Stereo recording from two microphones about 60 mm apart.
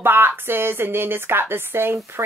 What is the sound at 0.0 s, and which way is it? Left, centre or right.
Speech, right.